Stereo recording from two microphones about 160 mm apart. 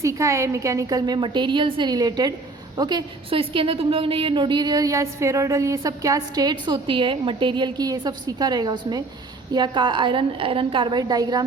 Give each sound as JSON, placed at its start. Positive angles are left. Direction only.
{"t": 0.0, "sound": "a woman's voice", "side_deg": -20}